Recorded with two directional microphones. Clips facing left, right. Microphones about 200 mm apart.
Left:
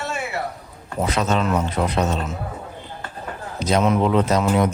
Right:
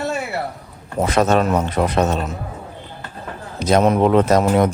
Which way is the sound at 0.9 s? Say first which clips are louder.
Right 5 dB; 50° right (ahead or behind).